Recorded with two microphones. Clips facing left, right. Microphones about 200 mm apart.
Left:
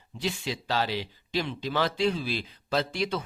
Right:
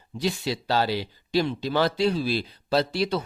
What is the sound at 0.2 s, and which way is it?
A man's voice, 40° right (ahead or behind).